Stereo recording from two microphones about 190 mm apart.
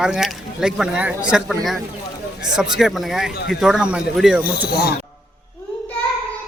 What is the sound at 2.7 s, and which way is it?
Speech, centre (ahead or behind).